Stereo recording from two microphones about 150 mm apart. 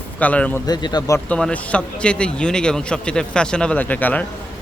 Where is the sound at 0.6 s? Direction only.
25° left (ahead or behind).